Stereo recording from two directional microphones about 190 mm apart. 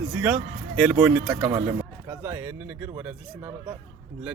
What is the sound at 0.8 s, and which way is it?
Speech, 10° right (ahead or behind).